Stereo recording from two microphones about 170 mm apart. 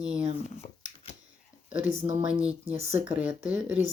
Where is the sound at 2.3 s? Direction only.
5° right (ahead or behind).